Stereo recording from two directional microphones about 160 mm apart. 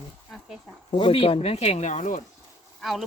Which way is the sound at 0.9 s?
35° left (ahead or behind).